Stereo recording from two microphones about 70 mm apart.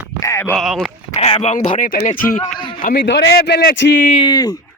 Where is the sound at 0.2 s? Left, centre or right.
Left.